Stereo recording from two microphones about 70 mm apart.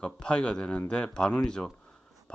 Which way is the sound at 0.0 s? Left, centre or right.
Centre.